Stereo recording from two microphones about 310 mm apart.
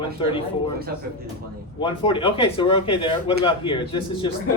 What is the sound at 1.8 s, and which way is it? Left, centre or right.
Speech, centre.